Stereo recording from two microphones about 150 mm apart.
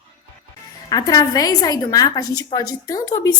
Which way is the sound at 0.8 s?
25° left (ahead or behind).